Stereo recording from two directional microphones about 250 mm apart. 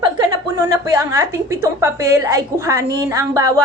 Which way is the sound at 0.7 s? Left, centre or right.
Centre.